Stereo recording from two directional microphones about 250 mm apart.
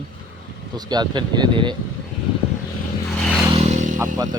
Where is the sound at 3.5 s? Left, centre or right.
Right.